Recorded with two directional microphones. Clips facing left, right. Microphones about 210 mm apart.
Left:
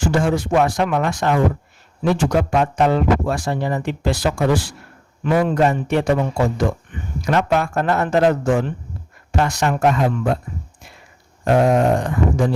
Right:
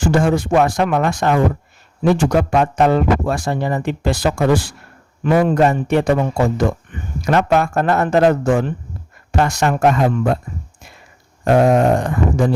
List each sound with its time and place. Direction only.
0.0 s a man's voice: 50° right (ahead or behind)
7.3 s a man's voice: 50° right (ahead or behind)
11.4 s a man's voice: 50° right (ahead or behind)